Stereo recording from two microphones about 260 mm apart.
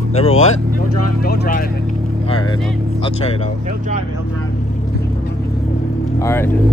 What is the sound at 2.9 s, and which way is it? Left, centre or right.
Speech, left.